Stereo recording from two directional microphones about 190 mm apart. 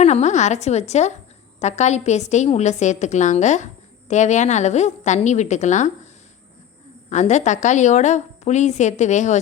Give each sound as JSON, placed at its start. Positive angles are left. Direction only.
{"t": 0.0, "sound": "a woman's voice", "side_deg": 35}
{"t": 7.1, "sound": "a woman's voice", "side_deg": 40}